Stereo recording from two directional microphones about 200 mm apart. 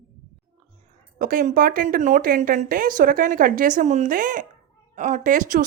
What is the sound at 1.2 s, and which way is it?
A woman's voice, 45° right (ahead or behind).